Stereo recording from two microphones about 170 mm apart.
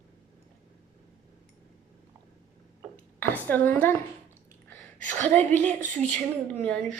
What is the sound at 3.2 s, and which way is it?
Speech, 10° left (ahead or behind).